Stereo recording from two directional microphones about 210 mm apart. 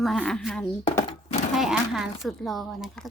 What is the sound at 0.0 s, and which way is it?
Speech, centre (ahead or behind).